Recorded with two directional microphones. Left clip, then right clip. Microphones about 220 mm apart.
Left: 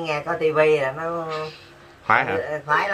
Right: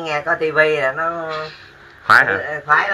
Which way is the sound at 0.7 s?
Centre (ahead or behind).